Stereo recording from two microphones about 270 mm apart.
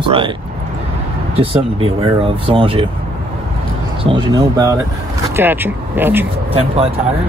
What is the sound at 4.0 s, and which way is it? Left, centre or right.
Speech, centre.